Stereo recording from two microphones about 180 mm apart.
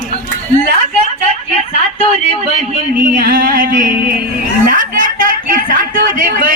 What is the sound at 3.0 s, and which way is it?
A man's voice, 50° right (ahead or behind).